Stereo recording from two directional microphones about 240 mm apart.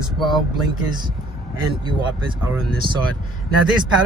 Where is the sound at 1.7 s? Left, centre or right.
Centre.